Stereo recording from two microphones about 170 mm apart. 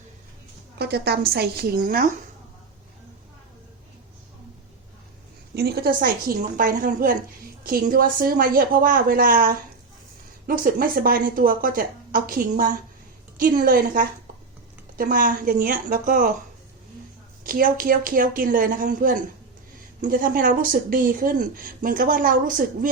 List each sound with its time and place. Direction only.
0.8 s a woman's voice: 70° right (ahead or behind)
5.5 s speech: 70° right (ahead or behind)
17.4 s speech: 55° right (ahead or behind)